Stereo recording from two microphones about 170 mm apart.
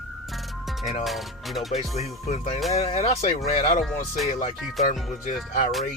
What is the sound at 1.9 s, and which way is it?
Music, 40° left (ahead or behind).